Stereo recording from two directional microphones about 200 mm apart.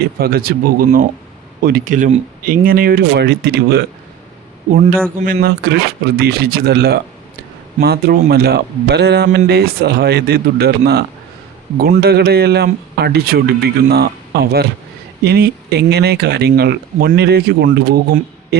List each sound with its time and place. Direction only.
0.2 s speech: 50° right (ahead or behind)
5.2 s a man's voice: 50° right (ahead or behind)